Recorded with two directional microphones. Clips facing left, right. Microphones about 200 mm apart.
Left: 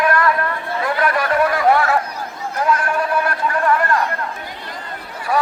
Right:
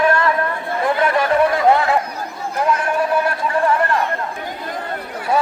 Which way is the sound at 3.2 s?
25° right (ahead or behind).